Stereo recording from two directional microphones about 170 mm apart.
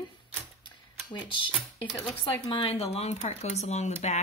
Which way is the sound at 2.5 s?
35° left (ahead or behind).